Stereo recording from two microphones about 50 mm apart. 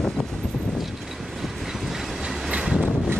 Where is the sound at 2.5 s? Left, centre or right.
Centre.